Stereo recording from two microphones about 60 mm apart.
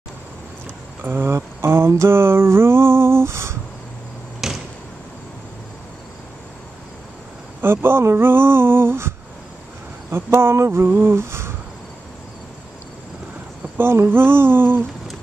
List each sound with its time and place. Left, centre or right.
1.0 s speech: right
1.3 s a sound: right
4.4 s arrow: centre
7.6 s speech: right
10.1 s a sound: right
13.7 s speech: right